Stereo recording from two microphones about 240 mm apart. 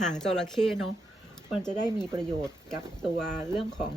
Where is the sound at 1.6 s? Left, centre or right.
Centre.